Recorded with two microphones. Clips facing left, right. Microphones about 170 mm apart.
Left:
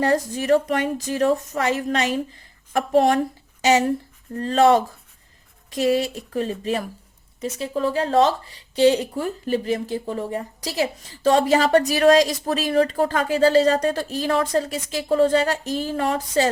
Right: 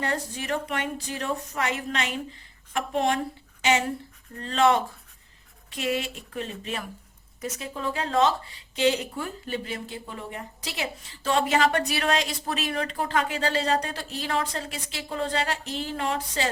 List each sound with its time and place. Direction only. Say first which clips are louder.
0.0 s a woman's voice: left 9 dB; 40° left (ahead or behind)